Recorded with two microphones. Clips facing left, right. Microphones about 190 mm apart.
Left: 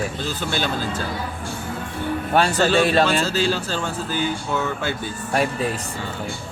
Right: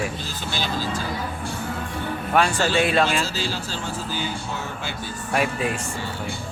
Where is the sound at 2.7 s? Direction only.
40° left (ahead or behind).